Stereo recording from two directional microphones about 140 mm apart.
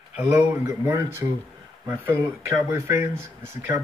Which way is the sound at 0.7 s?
20° right (ahead or behind).